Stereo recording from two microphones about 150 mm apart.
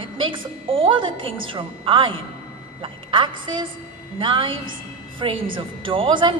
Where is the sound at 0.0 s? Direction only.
35° right (ahead or behind).